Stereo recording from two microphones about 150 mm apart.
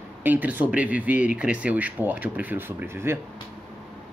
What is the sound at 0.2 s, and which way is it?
Speech, 10° right (ahead or behind).